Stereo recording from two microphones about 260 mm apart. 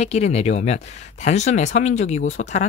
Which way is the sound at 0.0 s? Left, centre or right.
Left.